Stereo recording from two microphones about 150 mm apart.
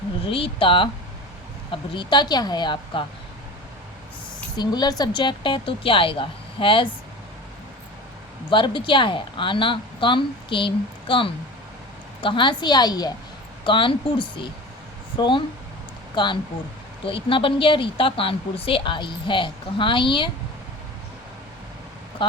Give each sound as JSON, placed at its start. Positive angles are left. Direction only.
{"t": 0.3, "sound": "a woman's voice", "side_deg": 35}
{"t": 4.5, "sound": "speech", "side_deg": 25}
{"t": 8.4, "sound": "a woman's voice", "side_deg": 35}
{"t": 22.2, "sound": "a sound", "side_deg": 30}